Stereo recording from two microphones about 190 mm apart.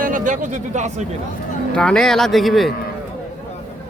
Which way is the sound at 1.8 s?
5° left (ahead or behind).